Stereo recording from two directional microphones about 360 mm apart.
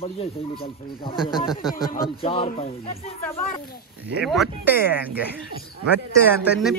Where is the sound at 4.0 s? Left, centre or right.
Centre.